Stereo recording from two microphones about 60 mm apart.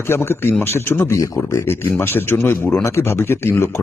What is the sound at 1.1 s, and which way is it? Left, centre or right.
Speech, left.